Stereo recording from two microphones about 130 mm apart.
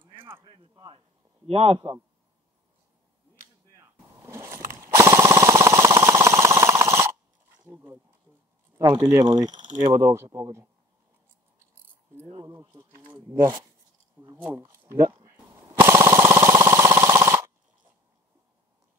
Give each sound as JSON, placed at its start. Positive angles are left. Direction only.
{"t": 0.0, "sound": "a sound", "side_deg": -40}
{"t": 0.4, "sound": "a man's voice", "side_deg": -35}
{"t": 3.7, "sound": "a sound", "side_deg": -25}
{"t": 7.7, "sound": "speech", "side_deg": -20}
{"t": 8.8, "sound": "speech", "side_deg": -35}
{"t": 9.9, "sound": "speech", "side_deg": -20}
{"t": 12.4, "sound": "speech", "side_deg": -30}
{"t": 13.1, "sound": "speech", "side_deg": -20}
{"t": 15.3, "sound": "jackhammer", "side_deg": -20}